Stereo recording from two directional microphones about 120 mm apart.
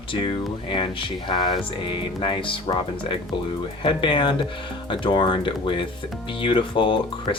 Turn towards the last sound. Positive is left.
turn(degrees=45)  # may be behind; listen again after turning